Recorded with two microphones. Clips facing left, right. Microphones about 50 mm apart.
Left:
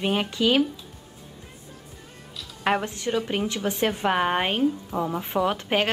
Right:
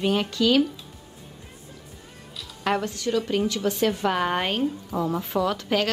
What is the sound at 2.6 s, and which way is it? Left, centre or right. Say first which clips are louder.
Speech: left 1 dB; left.